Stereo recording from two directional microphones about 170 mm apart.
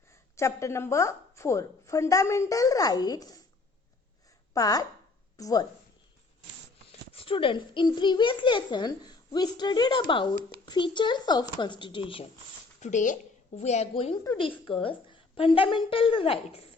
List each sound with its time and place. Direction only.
0.3 s a woman's voice: 15° left (ahead or behind)
4.5 s a child's voice: 20° left (ahead or behind)
7.1 s a child's voice: 30° left (ahead or behind)
12.8 s speech: 50° left (ahead or behind)